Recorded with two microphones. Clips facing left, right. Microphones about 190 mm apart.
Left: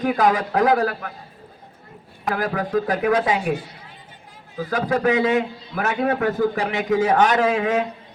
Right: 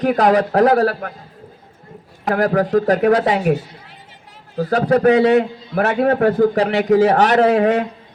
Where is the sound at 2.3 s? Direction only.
40° right (ahead or behind).